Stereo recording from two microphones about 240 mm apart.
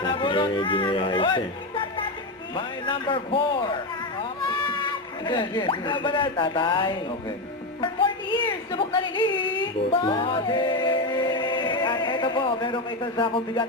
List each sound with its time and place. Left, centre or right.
0.0 s a man's voice: centre